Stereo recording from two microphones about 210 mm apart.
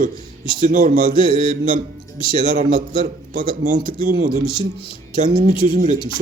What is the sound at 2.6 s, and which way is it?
Speech, 40° right (ahead or behind).